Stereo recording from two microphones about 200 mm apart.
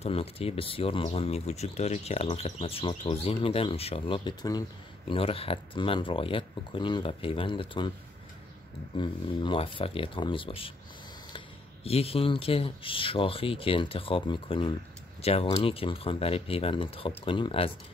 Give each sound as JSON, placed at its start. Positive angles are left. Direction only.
{"t": 0.0, "sound": "speech", "side_deg": 30}
{"t": 8.9, "sound": "speech", "side_deg": 25}